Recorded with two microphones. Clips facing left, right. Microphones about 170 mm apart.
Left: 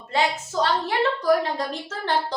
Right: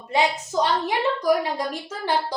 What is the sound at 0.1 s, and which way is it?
A woman's voice, 15° right (ahead or behind).